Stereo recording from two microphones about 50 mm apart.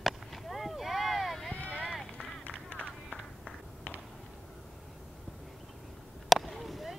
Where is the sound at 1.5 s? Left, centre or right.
Left.